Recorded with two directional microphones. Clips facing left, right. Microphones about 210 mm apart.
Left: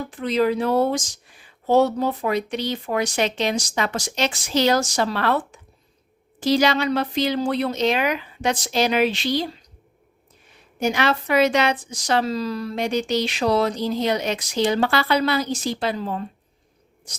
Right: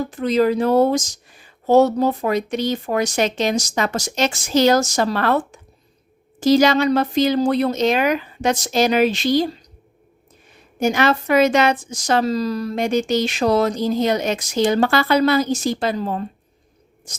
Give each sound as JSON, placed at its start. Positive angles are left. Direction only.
{"t": 0.0, "sound": "speech", "side_deg": -40}
{"t": 10.8, "sound": "speech", "side_deg": -45}